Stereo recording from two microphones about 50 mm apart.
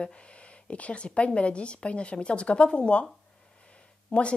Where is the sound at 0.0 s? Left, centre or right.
Left.